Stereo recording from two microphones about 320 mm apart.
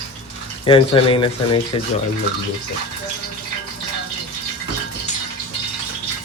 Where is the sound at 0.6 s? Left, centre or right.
Centre.